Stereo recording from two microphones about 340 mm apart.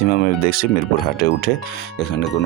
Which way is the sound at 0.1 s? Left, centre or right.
Left.